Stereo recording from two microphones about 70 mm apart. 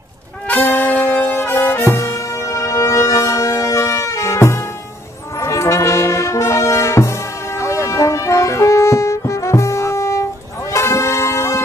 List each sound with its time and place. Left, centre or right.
0.5 s brass instrument: left
1.1 s brass instrument: left
10.7 s music: left